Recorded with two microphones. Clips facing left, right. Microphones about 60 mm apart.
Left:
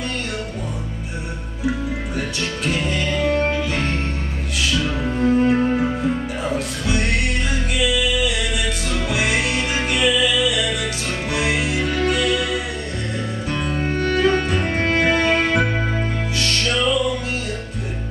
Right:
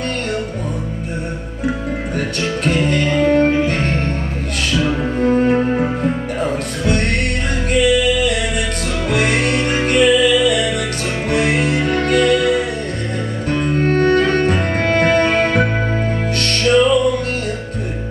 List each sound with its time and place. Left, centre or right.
2.9 s music: right
4.7 s music: centre
6.4 s music: centre
13.5 s music: centre
13.8 s music: right
14.8 s music: centre